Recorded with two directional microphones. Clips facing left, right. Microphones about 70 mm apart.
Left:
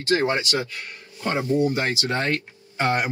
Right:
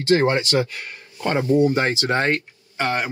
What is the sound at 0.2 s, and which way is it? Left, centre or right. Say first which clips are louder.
Speech: right 4 dB; right.